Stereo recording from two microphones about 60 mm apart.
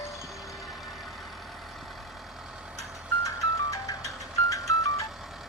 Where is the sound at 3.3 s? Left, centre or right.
Left.